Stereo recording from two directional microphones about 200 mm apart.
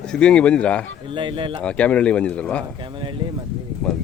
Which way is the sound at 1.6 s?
5° left (ahead or behind).